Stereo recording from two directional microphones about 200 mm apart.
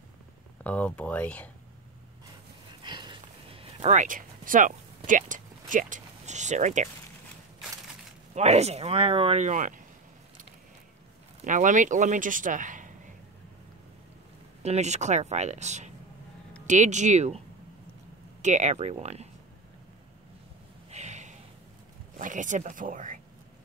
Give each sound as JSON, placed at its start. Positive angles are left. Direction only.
{"t": 0.7, "sound": "speech", "side_deg": 5}
{"t": 2.8, "sound": "a sound", "side_deg": -25}
{"t": 8.4, "sound": "speech", "side_deg": -30}
{"t": 11.4, "sound": "speech", "side_deg": -40}
{"t": 14.6, "sound": "speech", "side_deg": -35}
{"t": 18.4, "sound": "speech", "side_deg": -35}
{"t": 20.9, "sound": "a sound", "side_deg": -35}
{"t": 22.2, "sound": "speech", "side_deg": -40}